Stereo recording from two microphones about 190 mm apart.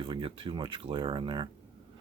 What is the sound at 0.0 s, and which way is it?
Speech, 25° right (ahead or behind).